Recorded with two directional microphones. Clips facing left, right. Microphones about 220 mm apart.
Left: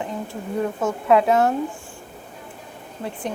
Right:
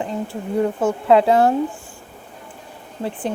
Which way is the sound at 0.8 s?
30° right (ahead or behind).